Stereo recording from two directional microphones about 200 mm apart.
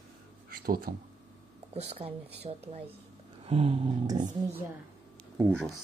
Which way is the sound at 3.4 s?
30° right (ahead or behind).